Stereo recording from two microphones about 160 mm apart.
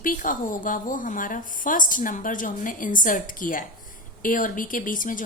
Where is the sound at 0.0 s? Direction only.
55° left (ahead or behind).